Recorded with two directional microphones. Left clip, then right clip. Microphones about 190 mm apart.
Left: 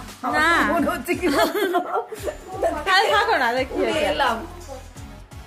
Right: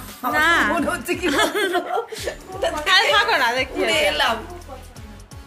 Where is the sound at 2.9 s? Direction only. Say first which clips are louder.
Right 2 dB; 20° left (ahead or behind).